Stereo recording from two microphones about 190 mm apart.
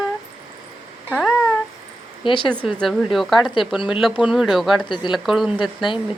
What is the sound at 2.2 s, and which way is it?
Speech, 25° left (ahead or behind).